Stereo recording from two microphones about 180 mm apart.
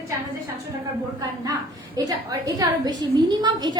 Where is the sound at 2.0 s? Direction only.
20° right (ahead or behind).